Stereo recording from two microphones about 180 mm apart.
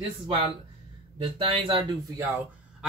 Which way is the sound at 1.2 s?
30° right (ahead or behind).